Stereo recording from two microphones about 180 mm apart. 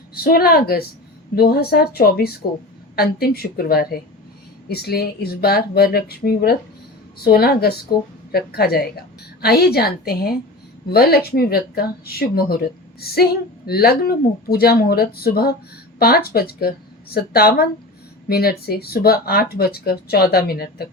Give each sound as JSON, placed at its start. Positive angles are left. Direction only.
{"t": 0.1, "sound": "speech", "side_deg": 60}